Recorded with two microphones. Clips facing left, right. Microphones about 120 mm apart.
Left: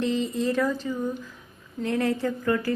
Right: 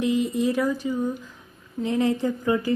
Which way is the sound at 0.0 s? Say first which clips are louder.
Right 3 dB; 10° right (ahead or behind).